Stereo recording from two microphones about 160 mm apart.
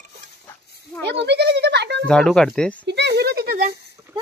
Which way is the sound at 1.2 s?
90° right.